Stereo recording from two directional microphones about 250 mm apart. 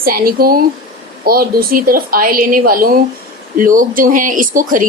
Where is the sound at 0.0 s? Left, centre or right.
Right.